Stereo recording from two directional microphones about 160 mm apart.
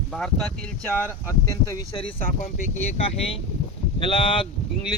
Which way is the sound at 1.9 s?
35° left (ahead or behind).